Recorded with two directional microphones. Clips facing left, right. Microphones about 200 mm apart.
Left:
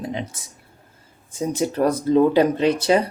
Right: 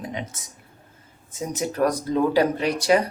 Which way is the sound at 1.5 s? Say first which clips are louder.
Left 3 dB; 30° left (ahead or behind).